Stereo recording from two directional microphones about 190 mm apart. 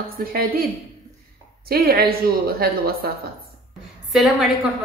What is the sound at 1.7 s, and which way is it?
A woman's voice, 50° right (ahead or behind).